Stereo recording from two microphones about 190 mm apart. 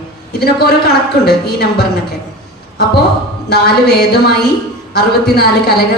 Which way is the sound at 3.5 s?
60° left (ahead or behind).